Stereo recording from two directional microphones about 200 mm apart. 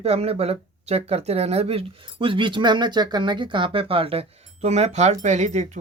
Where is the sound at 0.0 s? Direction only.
30° right (ahead or behind).